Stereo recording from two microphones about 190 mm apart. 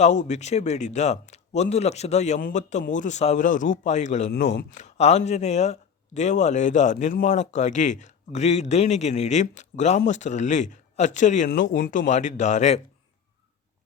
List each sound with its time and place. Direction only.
0.0 s speech: 40° left (ahead or behind)
11.6 s speech: 75° left (ahead or behind)
11.9 s speech: 40° left (ahead or behind)